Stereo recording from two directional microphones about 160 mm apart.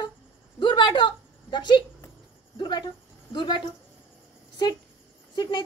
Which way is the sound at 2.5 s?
30° left (ahead or behind).